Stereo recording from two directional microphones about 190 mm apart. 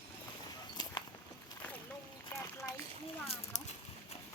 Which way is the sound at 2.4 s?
15° left (ahead or behind).